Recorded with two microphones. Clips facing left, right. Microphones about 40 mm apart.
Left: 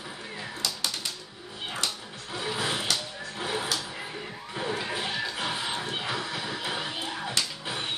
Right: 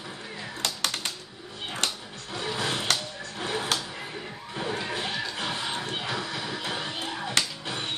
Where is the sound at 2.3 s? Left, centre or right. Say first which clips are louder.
Even; centre.